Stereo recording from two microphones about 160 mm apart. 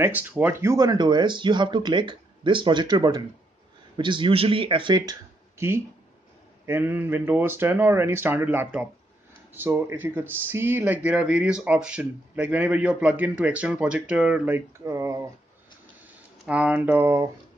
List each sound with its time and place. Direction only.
0.0 s speech: 10° right (ahead or behind); by 5.1 s 30° right (ahead or behind)
6.6 s speech: 15° right (ahead or behind)
16.4 s speech: 5° right (ahead or behind)